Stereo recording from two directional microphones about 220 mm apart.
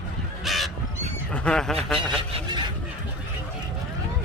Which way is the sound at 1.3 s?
5° left (ahead or behind).